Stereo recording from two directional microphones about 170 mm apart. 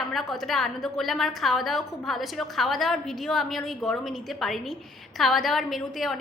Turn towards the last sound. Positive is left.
turn(degrees=0)  # may be behind; listen again after turning